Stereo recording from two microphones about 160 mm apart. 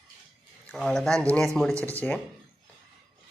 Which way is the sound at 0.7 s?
5° left (ahead or behind).